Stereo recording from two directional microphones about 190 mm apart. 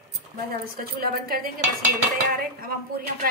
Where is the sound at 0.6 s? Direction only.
50° right (ahead or behind).